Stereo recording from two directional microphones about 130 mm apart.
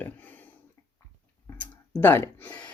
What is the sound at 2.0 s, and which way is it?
Speech, 15° left (ahead or behind).